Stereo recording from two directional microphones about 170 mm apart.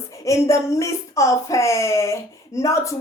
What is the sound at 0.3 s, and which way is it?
A woman's voice, 15° left (ahead or behind).